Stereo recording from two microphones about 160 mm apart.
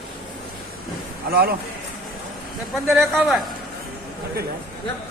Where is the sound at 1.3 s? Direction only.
70° right (ahead or behind).